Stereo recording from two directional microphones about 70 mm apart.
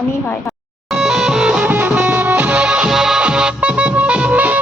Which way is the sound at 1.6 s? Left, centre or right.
Right.